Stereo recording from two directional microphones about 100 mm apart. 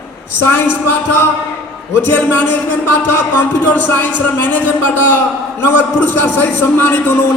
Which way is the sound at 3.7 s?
20° left (ahead or behind).